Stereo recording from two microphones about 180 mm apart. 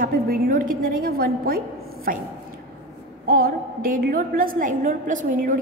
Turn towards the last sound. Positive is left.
turn(degrees=-50)  # may be behind; listen again after turning